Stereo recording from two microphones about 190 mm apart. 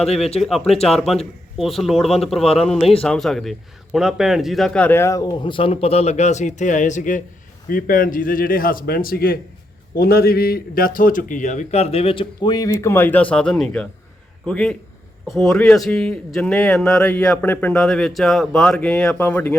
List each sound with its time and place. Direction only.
0.3 s a man's voice: centre (ahead or behind)